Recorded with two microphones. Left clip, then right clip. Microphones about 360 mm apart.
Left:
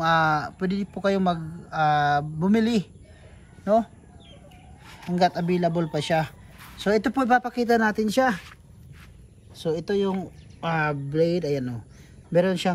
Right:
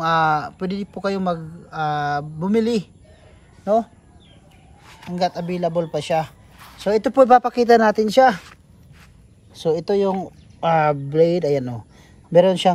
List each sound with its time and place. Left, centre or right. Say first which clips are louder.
0.0 s speech: right 3 dB; centre
5.1 s speech: even; centre
9.6 s speech: right 6 dB; centre